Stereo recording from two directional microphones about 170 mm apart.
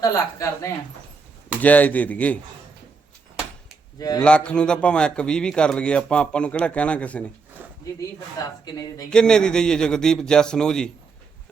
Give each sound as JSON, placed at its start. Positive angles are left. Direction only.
{"t": 0.0, "sound": "a woman's voice", "side_deg": 20}
{"t": 1.6, "sound": "a man's voice", "side_deg": 10}
{"t": 3.9, "sound": "speech", "side_deg": 20}
{"t": 4.2, "sound": "a man's voice", "side_deg": 5}
{"t": 7.6, "sound": "a sound", "side_deg": -10}
{"t": 8.6, "sound": "a woman's voice", "side_deg": 20}
{"t": 9.0, "sound": "a man's voice", "side_deg": 5}